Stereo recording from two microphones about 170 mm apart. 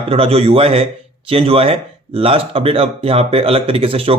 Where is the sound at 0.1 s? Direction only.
35° right (ahead or behind).